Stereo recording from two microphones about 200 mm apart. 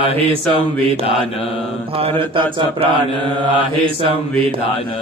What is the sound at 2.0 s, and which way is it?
Speech, 25° right (ahead or behind).